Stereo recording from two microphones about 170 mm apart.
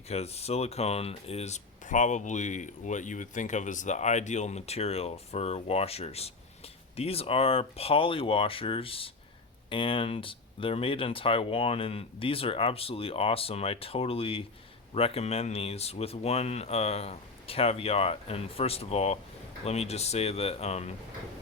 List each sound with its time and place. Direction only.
0.1 s speech: 40° left (ahead or behind)